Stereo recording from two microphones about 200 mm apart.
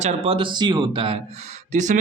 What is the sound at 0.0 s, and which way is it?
Speech, 30° right (ahead or behind).